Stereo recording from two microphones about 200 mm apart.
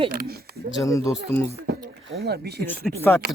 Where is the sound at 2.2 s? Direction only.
55° right (ahead or behind).